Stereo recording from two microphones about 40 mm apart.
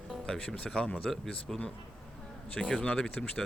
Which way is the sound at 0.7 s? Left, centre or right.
Left.